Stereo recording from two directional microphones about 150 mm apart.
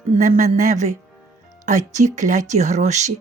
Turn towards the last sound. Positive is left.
turn(degrees=-50)  # may be behind; listen again after turning